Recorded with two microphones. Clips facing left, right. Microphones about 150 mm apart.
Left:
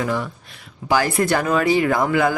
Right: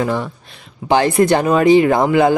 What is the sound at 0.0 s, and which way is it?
Speech, 30° right (ahead or behind).